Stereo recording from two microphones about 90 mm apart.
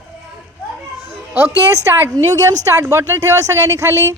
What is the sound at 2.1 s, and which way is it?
Speech, 40° right (ahead or behind).